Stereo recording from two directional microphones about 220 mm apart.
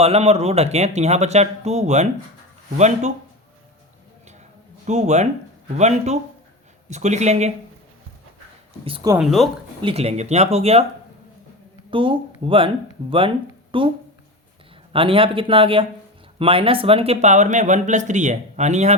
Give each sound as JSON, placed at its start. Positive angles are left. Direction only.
{"t": 0.0, "sound": "speech", "side_deg": -30}
{"t": 4.9, "sound": "speech", "side_deg": -30}
{"t": 8.8, "sound": "speech", "side_deg": -25}
{"t": 9.1, "sound": "speech", "side_deg": 0}
{"t": 9.8, "sound": "speech", "side_deg": -30}
{"t": 11.9, "sound": "speech", "side_deg": -25}
{"t": 14.9, "sound": "speech", "side_deg": -25}